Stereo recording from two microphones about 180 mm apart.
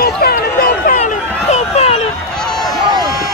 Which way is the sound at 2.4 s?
Centre (ahead or behind).